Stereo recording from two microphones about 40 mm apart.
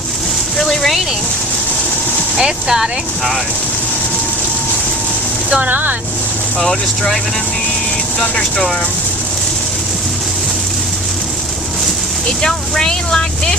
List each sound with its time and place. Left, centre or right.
0.6 s a sound: centre
2.4 s speech: centre
5.6 s speech: right
6.6 s speech: centre
12.4 s speech: centre